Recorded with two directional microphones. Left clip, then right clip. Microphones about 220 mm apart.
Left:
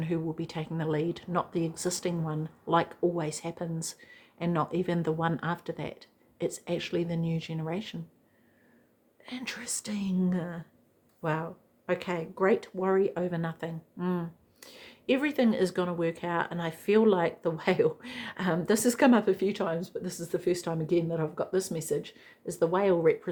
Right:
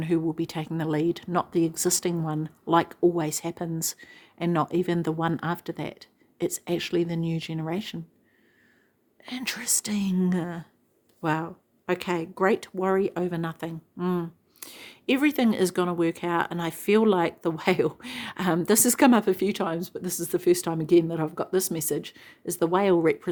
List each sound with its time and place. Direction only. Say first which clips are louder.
0.0 s speech: right 7 dB; 40° right (ahead or behind)
9.2 s speech: right 6 dB; 45° right (ahead or behind)